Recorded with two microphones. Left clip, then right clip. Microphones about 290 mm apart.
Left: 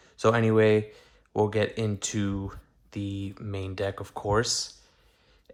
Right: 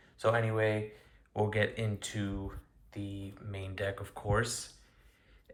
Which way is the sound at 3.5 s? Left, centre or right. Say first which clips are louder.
Left 6 dB; centre.